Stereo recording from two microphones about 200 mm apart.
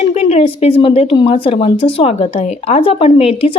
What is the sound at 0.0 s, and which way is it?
A woman's voice, 30° left (ahead or behind).